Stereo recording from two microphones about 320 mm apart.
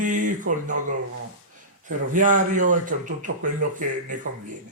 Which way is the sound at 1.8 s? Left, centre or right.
Right.